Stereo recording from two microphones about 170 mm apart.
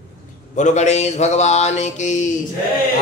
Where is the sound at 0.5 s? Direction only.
45° left (ahead or behind).